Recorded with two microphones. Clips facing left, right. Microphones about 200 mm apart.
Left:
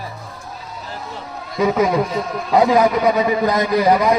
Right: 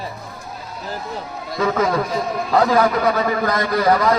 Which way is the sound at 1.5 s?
15° left (ahead or behind).